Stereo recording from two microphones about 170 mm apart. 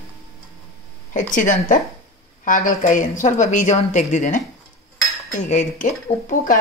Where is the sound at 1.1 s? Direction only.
50° left (ahead or behind).